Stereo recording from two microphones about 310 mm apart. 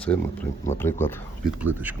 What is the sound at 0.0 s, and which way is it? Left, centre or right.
Speech, centre.